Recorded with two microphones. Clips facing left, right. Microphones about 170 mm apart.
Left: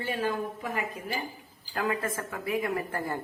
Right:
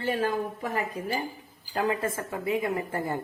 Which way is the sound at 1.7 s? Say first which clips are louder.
Right 3 dB; 25° right (ahead or behind).